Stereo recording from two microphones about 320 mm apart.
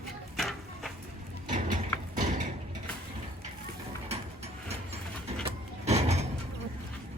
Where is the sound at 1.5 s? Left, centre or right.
Right.